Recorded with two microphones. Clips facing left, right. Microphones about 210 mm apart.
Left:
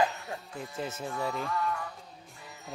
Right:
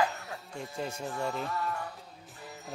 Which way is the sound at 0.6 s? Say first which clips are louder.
Right 1 dB; 5° left (ahead or behind).